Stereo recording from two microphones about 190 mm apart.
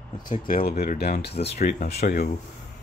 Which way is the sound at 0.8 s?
55° left (ahead or behind).